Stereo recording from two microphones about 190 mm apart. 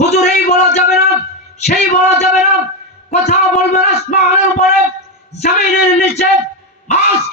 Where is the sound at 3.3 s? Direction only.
35° left (ahead or behind).